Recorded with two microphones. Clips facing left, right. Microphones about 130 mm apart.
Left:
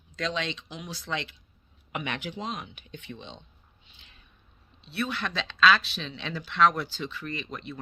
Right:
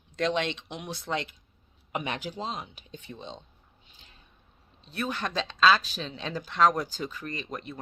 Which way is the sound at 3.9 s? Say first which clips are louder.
Right 1 dB; 40° right (ahead or behind).